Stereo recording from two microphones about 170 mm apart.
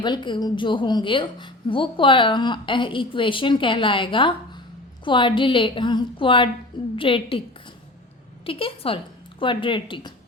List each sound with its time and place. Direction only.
0.0 s a woman's voice: 25° left (ahead or behind)
8.4 s a woman's voice: 30° left (ahead or behind)